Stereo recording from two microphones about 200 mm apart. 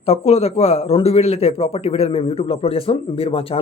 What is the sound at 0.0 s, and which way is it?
A man's voice, 30° left (ahead or behind).